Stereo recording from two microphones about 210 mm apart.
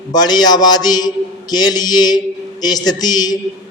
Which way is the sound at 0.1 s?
20° left (ahead or behind).